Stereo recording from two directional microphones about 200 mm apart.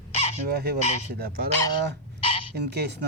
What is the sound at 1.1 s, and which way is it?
Speech, 50° right (ahead or behind).